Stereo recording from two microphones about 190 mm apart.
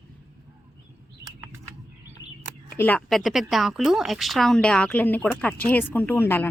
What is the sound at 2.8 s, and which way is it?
Speech, 5° left (ahead or behind).